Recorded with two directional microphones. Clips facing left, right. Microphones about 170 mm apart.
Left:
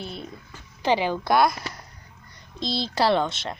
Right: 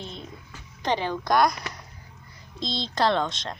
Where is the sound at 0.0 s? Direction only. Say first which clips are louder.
Left 3 dB; 10° left (ahead or behind).